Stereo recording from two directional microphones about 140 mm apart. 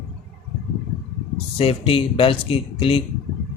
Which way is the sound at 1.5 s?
40° left (ahead or behind).